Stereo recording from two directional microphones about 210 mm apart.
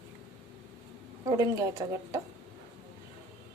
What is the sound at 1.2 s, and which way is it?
Speech, 15° right (ahead or behind).